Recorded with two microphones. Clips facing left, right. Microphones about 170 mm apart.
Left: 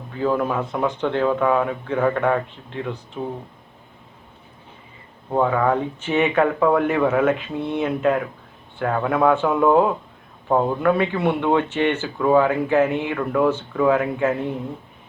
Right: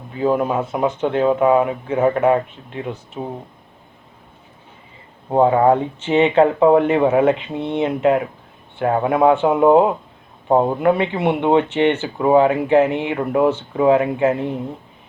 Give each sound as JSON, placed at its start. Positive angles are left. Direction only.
{"t": 0.1, "sound": "speech", "side_deg": -20}
{"t": 5.3, "sound": "speech", "side_deg": -30}